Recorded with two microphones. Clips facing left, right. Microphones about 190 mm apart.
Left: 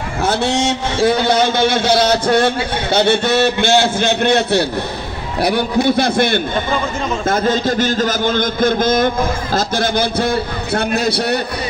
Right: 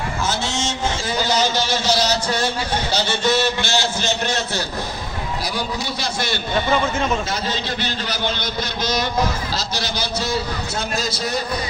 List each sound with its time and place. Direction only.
0.2 s a man's voice: 60° left (ahead or behind)